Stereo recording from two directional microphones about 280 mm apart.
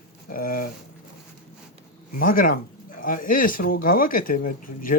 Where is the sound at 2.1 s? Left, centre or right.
Left.